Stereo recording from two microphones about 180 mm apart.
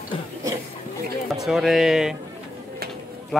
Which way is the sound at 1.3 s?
Centre (ahead or behind).